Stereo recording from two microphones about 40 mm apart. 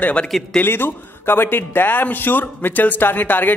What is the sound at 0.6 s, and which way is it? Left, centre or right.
A man's voice, left.